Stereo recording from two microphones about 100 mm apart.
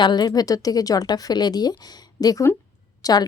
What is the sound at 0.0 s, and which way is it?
A woman's voice, 45° left (ahead or behind).